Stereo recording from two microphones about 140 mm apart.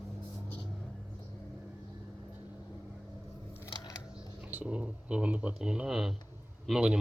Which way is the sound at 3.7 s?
30° left (ahead or behind).